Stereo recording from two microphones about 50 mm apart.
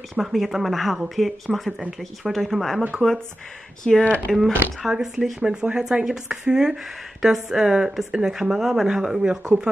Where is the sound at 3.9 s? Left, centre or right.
Centre.